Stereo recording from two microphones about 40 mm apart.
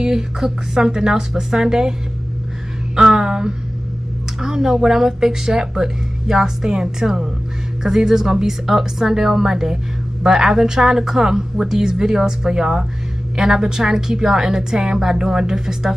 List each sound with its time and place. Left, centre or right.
0.0 s speech: centre
3.0 s speech: centre